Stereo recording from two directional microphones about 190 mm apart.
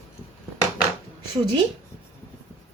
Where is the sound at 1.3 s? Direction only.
25° right (ahead or behind).